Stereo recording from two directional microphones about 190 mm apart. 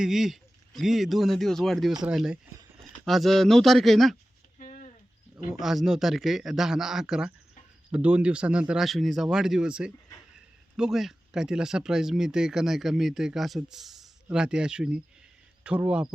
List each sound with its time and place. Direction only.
0.0 s speech: centre (ahead or behind)
4.5 s a sound: 40° left (ahead or behind)
5.5 s speech: centre (ahead or behind)